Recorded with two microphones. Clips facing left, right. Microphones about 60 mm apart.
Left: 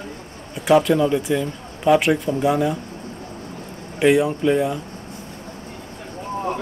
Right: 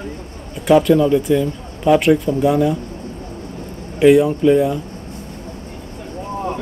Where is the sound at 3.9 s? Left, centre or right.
Centre.